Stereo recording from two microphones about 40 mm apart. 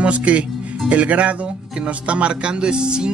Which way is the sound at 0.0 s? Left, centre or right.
Right.